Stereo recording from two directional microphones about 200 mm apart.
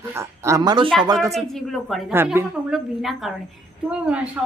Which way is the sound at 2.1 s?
10° right (ahead or behind).